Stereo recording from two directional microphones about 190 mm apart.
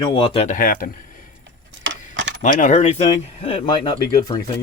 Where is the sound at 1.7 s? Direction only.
75° right (ahead or behind).